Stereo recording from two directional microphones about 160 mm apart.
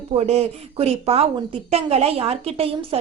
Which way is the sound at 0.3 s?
40° right (ahead or behind).